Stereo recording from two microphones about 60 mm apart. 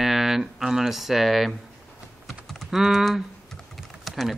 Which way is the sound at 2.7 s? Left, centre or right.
Centre.